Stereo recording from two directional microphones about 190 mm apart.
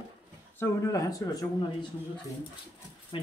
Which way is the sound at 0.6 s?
15° left (ahead or behind).